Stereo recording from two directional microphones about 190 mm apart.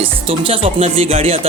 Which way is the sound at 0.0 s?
30° right (ahead or behind).